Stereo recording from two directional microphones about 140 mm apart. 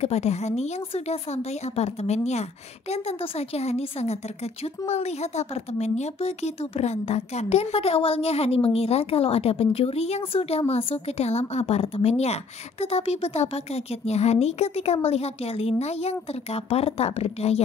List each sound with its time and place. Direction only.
0.0 s speech: 50° left (ahead or behind)